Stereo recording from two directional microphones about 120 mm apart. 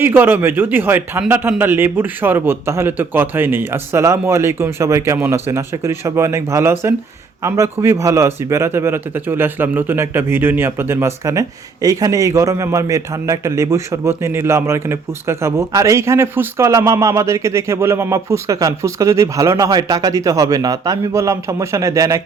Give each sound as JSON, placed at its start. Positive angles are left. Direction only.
{"t": 0.0, "sound": "a man's voice", "side_deg": -15}